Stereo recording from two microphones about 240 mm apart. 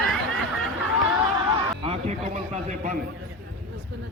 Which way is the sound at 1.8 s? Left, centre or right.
Right.